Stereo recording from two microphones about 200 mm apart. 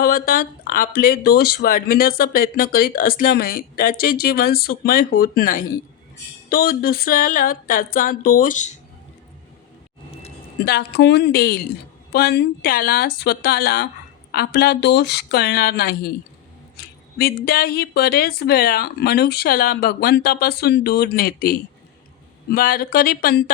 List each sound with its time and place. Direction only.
0.0 s speech: 45° left (ahead or behind)
10.7 s speech: 55° left (ahead or behind)
16.7 s a sound: 50° left (ahead or behind)
17.4 s speech: 50° left (ahead or behind)